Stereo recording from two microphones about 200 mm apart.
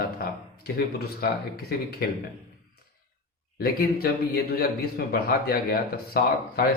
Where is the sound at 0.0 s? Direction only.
50° left (ahead or behind).